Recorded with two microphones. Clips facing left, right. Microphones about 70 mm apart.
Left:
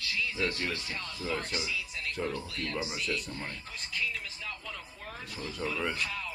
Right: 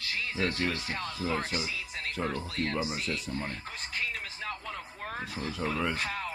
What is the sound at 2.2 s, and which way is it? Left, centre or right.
Speech, right.